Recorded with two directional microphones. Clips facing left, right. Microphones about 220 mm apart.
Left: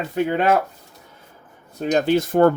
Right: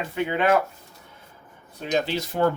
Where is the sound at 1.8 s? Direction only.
50° left (ahead or behind).